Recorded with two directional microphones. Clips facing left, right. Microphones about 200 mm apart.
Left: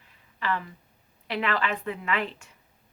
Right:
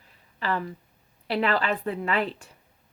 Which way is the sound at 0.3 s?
35° right (ahead or behind).